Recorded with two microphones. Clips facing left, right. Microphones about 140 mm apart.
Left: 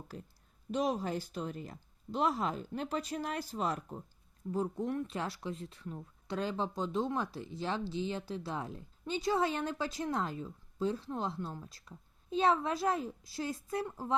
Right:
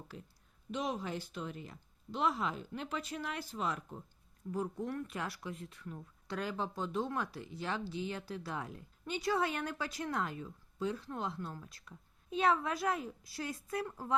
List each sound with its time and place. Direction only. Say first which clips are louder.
0.7 s speech: left 5 dB; 40° left (ahead or behind)
4.9 s speech: left 4 dB; 25° left (ahead or behind)